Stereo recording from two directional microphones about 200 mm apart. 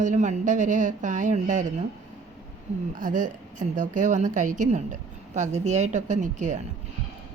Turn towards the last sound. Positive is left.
turn(degrees=-40)  # may be behind; listen again after turning